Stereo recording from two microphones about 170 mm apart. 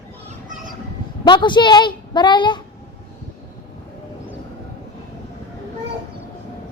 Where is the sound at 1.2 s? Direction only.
25° left (ahead or behind).